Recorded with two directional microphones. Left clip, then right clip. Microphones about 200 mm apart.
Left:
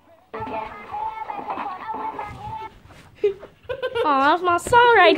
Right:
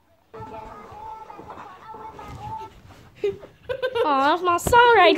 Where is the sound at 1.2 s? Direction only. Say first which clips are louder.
Left 11 dB; 35° left (ahead or behind).